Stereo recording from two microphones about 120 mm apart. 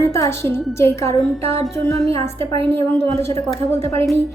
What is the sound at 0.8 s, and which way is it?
A woman's voice, 20° left (ahead or behind).